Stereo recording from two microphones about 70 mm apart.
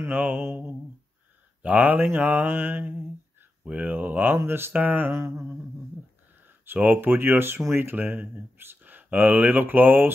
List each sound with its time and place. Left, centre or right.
0.1 s speech: right
0.4 s speech: right
1.6 s speech: right
6.6 s speech: right